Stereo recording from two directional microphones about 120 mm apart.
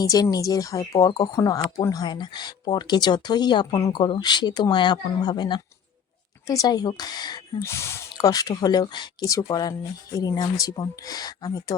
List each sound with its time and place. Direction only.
0.0 s speech: 35° left (ahead or behind)
7.6 s speech: 20° left (ahead or behind)